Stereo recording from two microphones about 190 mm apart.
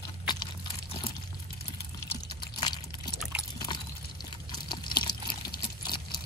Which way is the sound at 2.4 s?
25° left (ahead or behind).